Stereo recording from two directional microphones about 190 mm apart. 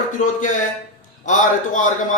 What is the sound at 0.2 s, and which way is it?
A man's voice, 45° left (ahead or behind).